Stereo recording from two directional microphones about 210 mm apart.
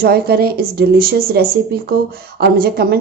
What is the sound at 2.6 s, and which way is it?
Speech, 45° right (ahead or behind).